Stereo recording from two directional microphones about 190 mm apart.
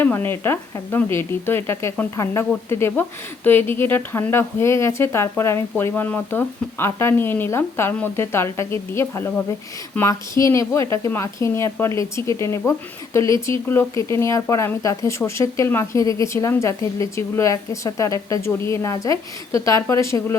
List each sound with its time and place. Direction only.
0.0 s speech: 10° left (ahead or behind)